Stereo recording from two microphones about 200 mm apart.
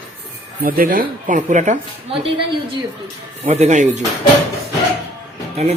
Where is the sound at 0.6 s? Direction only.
45° right (ahead or behind); by 2.4 s 25° right (ahead or behind).